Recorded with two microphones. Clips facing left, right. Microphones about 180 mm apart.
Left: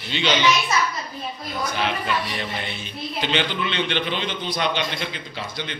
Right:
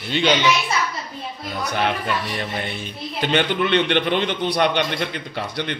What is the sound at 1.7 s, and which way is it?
Speech, 55° right (ahead or behind).